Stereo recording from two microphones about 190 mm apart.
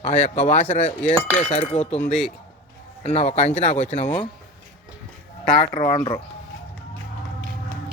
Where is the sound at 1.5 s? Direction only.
35° left (ahead or behind).